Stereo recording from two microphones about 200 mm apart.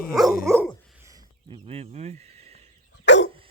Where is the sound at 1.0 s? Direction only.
25° right (ahead or behind).